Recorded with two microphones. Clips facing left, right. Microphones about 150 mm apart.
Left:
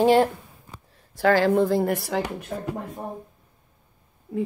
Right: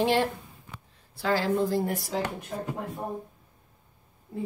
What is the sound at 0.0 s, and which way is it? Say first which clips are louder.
Speech: left 7 dB; 45° left (ahead or behind).